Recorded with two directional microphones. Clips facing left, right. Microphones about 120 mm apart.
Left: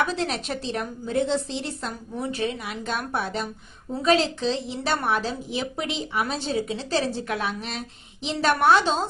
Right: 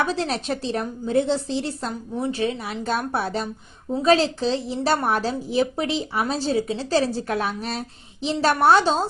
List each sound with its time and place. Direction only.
0.0 s a woman's voice: 35° right (ahead or behind)